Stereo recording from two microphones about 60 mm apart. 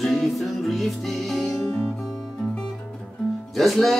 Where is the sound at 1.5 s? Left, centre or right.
Left.